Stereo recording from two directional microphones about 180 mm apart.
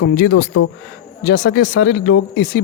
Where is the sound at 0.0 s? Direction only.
80° left.